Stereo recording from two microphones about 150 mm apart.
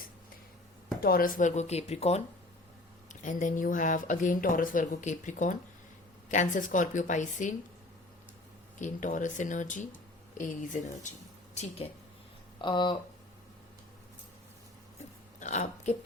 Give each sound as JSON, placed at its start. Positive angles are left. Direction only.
{"t": 1.0, "sound": "speech", "side_deg": 75}
{"t": 3.1, "sound": "speech", "side_deg": 55}
{"t": 8.8, "sound": "speech", "side_deg": 60}
{"t": 12.6, "sound": "speech", "side_deg": 30}
{"t": 15.4, "sound": "speech", "side_deg": 50}